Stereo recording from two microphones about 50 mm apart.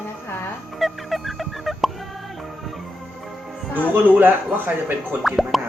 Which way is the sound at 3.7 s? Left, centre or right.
Right.